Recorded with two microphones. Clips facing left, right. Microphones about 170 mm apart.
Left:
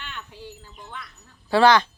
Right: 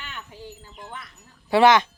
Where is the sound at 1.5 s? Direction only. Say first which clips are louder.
Right 1 dB; 20° right (ahead or behind).